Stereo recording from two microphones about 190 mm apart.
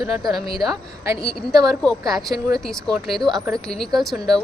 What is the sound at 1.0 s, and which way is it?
A woman's voice, 15° right (ahead or behind).